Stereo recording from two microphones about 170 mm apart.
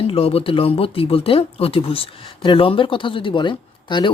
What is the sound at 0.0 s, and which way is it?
Speech, 35° left (ahead or behind).